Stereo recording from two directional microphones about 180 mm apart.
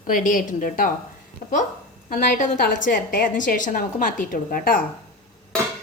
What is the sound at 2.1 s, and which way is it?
A woman's voice, 50° left (ahead or behind).